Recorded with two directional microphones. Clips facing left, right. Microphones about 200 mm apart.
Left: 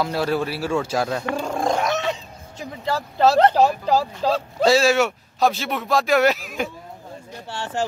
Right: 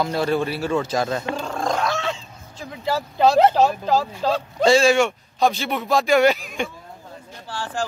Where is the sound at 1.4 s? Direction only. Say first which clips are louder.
Left 2 dB; 10° left (ahead or behind).